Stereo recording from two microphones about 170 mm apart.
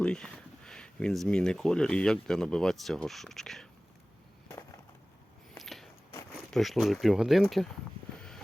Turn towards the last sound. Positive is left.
turn(degrees=0)  # may be behind; listen again after turning